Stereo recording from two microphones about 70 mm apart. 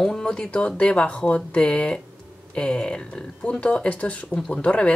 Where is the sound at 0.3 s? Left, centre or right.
Centre.